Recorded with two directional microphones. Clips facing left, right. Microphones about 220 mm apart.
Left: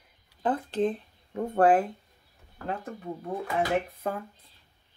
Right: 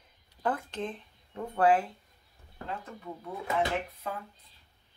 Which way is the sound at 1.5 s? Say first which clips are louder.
Left 3 dB; 50° left (ahead or behind).